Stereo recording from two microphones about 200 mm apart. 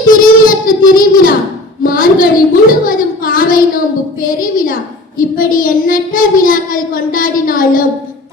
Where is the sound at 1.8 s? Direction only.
45° left (ahead or behind).